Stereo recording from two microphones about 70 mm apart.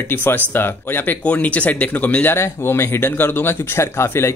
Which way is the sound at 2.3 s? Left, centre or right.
Left.